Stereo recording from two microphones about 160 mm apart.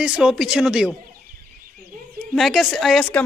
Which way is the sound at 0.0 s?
5° right (ahead or behind).